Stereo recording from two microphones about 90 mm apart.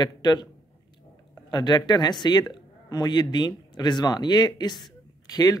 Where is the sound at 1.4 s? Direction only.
50° left (ahead or behind).